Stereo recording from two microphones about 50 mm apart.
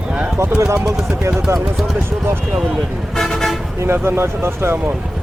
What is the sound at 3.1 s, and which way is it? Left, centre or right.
Toot, centre.